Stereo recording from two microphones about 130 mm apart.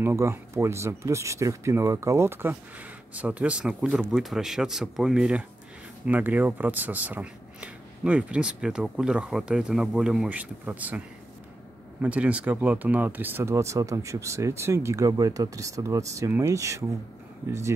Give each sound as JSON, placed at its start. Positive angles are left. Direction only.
{"t": 0.0, "sound": "speech", "side_deg": -20}
{"t": 12.0, "sound": "speech", "side_deg": -10}